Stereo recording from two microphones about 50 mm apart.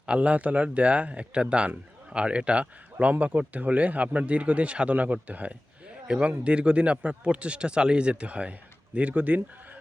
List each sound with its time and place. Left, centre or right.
0.0 s speech: right